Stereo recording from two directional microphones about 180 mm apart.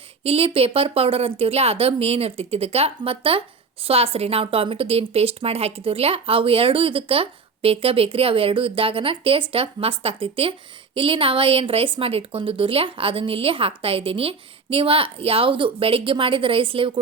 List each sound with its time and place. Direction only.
0.2 s speech: 35° right (ahead or behind)